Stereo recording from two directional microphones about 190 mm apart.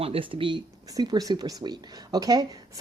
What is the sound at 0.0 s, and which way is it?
Speech, 30° right (ahead or behind).